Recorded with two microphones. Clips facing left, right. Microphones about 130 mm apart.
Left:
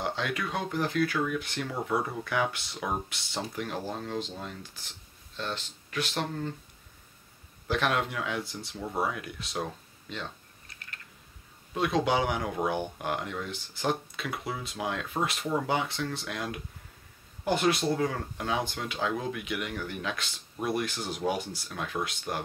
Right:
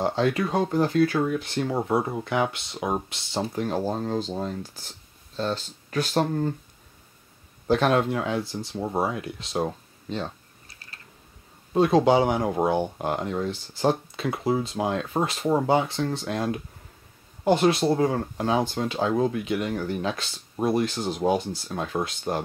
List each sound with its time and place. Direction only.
0.0 s speech: 35° right (ahead or behind)
7.6 s speech: 35° right (ahead or behind)